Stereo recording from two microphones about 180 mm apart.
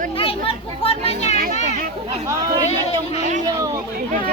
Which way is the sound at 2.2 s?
20° right (ahead or behind).